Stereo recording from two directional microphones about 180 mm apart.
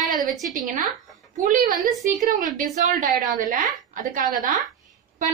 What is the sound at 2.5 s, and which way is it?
A woman's voice, 50° right (ahead or behind).